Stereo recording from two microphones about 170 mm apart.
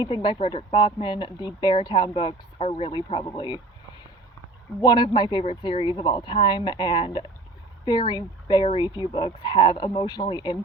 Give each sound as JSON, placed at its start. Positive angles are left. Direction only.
{"t": 0.0, "sound": "speech", "side_deg": 30}
{"t": 4.8, "sound": "speech", "side_deg": 25}